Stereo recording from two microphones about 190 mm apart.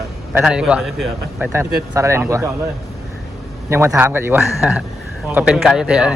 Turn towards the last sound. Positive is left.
turn(degrees=-5)  # may be behind; listen again after turning